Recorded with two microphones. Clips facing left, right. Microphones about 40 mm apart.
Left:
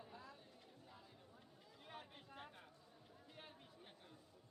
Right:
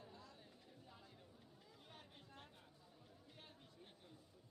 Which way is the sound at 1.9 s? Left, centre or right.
Centre.